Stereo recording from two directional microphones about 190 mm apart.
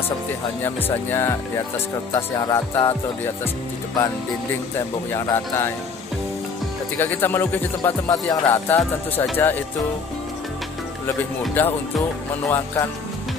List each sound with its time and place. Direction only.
0.7 s music: 10° left (ahead or behind)
5.1 s music: 15° left (ahead or behind)
7.0 s music: 10° left (ahead or behind)
11.6 s music: 10° left (ahead or behind)